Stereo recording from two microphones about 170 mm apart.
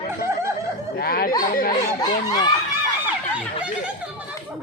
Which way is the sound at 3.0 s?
5° right (ahead or behind).